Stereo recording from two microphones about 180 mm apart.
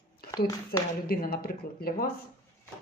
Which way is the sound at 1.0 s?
55° left (ahead or behind).